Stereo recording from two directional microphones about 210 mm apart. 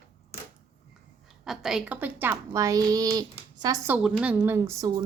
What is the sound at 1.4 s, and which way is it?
Speech, centre (ahead or behind).